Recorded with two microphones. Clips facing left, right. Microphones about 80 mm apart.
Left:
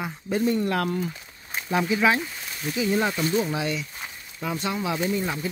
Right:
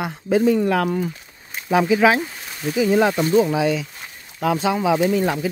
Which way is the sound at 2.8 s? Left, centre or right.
Right.